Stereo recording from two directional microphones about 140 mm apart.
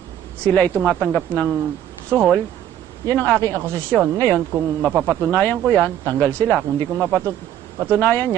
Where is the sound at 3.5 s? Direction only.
20° right (ahead or behind).